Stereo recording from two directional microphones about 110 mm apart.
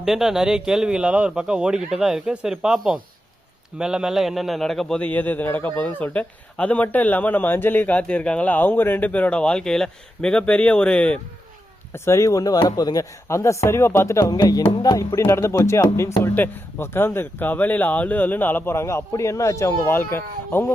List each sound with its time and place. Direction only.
0.0 s a man's voice: 5° right (ahead or behind)
11.9 s speech: 25° left (ahead or behind)
14.8 s music: 35° left (ahead or behind)
15.2 s speech: 25° left (ahead or behind)